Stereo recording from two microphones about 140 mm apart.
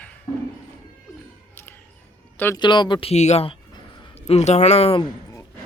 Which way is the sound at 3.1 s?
50° left (ahead or behind).